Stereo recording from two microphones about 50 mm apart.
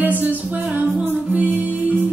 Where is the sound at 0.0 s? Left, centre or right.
Right.